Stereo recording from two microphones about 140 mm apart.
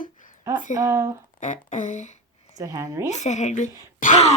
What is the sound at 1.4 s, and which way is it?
Speech, 60° left (ahead or behind).